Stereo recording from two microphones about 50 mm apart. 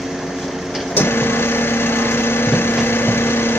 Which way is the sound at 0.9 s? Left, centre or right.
Left.